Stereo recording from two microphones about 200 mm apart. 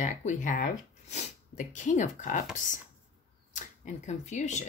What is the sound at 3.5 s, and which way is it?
Speech, 35° left (ahead or behind).